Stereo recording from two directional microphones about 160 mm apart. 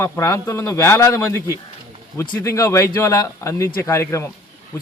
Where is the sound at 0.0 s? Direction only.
15° left (ahead or behind).